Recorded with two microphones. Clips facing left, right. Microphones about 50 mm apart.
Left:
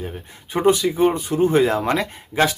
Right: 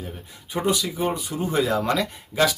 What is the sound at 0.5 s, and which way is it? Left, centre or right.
Speech, left.